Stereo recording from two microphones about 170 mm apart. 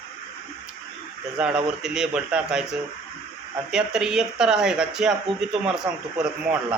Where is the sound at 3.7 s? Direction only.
5° right (ahead or behind).